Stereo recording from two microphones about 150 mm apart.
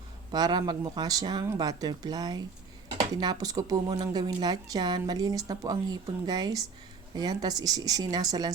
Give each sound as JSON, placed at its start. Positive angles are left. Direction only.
{"t": 0.3, "sound": "a woman's voice", "side_deg": -30}